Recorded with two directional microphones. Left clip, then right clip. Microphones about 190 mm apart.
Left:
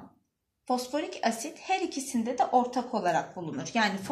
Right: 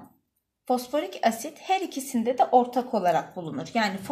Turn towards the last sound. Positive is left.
turn(degrees=-30)  # may be behind; listen again after turning